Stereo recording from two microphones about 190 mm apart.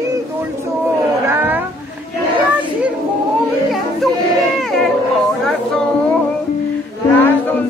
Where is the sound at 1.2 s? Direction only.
10° right (ahead or behind).